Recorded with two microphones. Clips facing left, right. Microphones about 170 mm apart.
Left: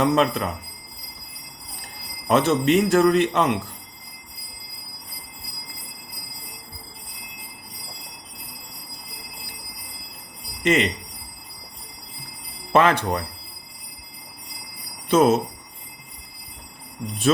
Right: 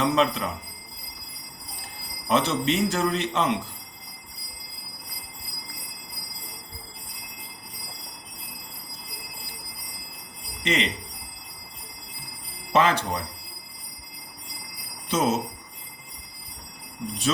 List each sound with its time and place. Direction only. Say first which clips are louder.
0.0 s a man's voice: left 3 dB; 50° left (ahead or behind)
2.2 s a man's voice: left 5 dB; 50° left (ahead or behind)
10.6 s speech: left 6 dB; 50° left (ahead or behind)
12.7 s speech: left 4 dB; 55° left (ahead or behind)
15.1 s speech: left 7 dB; 60° left (ahead or behind)
17.3 s a man's voice: left 7 dB; 50° left (ahead or behind)